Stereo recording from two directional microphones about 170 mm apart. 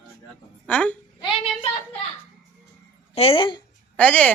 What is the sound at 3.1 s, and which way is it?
Speech, 35° left (ahead or behind).